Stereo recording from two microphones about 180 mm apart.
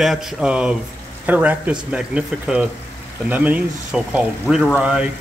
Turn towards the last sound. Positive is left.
turn(degrees=-5)  # may be behind; listen again after turning